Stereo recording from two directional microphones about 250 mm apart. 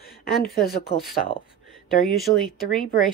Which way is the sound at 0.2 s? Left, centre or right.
Left.